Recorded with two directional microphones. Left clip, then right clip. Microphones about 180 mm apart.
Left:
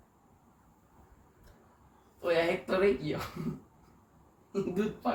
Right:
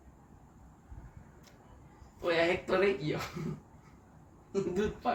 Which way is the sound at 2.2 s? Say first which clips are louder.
Even; 30° right (ahead or behind).